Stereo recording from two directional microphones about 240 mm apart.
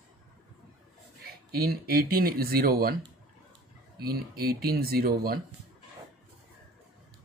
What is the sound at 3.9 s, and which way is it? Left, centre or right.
Speech, right.